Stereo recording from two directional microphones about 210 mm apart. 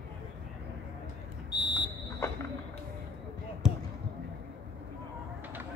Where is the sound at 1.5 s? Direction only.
20° left (ahead or behind).